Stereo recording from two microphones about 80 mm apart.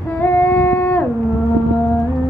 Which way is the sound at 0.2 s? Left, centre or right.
Left.